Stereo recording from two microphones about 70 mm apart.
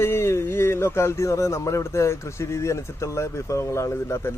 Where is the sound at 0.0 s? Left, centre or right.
Left.